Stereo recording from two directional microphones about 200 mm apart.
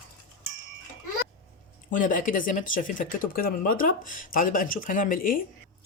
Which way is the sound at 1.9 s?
40° left (ahead or behind).